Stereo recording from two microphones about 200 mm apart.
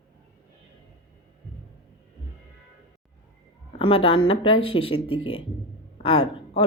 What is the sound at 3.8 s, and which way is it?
Speech, 25° left (ahead or behind).